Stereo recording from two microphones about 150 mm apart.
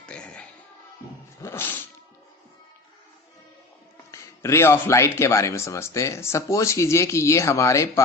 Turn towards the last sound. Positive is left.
turn(degrees=20)  # may be behind; listen again after turning